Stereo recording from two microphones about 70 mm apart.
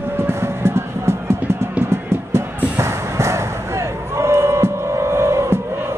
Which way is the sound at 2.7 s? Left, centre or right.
Right.